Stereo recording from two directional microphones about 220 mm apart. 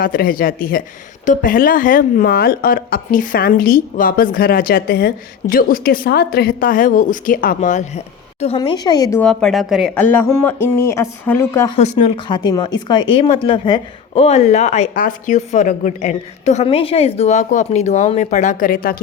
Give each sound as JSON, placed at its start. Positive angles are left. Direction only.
{"t": 0.0, "sound": "speech", "side_deg": 40}
{"t": 9.2, "sound": "speech", "side_deg": 0}
{"t": 11.8, "sound": "speech", "side_deg": 30}
{"t": 12.3, "sound": "speech", "side_deg": 20}